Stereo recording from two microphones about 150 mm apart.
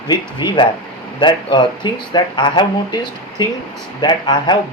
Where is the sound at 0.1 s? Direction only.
30° left (ahead or behind).